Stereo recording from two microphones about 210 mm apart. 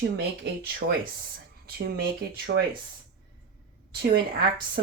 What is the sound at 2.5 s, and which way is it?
Speech, 50° right (ahead or behind).